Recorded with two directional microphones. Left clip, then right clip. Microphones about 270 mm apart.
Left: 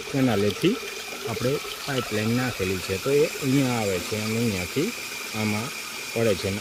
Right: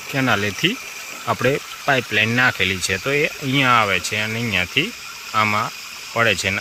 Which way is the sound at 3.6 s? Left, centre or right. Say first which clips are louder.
Right 10 dB; right.